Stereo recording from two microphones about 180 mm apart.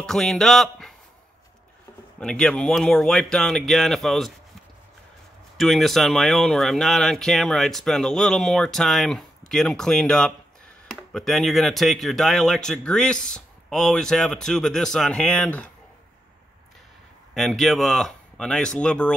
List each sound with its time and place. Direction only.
0.0 s speech: centre (ahead or behind)
2.1 s speech: 5° left (ahead or behind)
5.6 s speech: centre (ahead or behind)
17.3 s speech: centre (ahead or behind)